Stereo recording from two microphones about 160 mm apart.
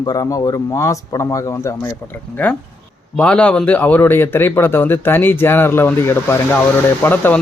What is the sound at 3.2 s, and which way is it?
Speech, 5° left (ahead or behind).